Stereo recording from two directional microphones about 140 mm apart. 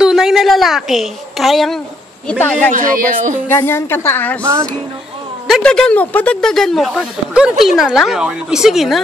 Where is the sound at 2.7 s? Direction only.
70° right (ahead or behind).